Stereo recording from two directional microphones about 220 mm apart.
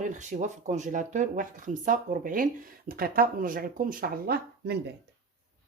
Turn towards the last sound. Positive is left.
turn(degrees=-45)  # may be behind; listen again after turning